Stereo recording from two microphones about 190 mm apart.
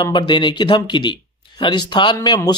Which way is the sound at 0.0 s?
25° left (ahead or behind).